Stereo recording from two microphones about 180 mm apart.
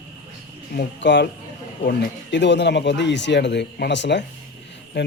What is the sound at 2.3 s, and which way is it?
Speech, 75° left (ahead or behind).